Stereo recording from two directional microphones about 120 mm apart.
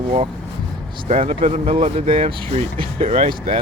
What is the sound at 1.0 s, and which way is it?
Speech, 65° right (ahead or behind).